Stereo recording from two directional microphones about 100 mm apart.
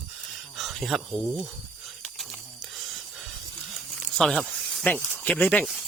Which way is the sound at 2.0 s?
Centre (ahead or behind).